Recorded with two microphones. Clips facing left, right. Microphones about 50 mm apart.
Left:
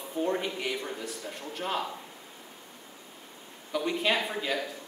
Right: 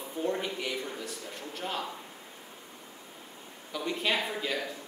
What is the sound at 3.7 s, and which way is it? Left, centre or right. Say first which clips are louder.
Speech: left 3 dB; centre.